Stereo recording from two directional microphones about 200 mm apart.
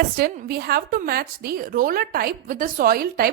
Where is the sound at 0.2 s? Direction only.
50° right (ahead or behind).